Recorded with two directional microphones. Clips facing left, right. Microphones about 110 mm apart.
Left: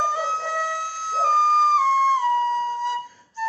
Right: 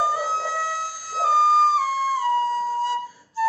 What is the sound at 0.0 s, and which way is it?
Music, 5° right (ahead or behind).